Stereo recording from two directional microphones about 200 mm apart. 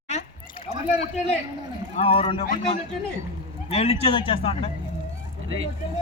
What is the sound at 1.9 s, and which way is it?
Speech, 30° left (ahead or behind).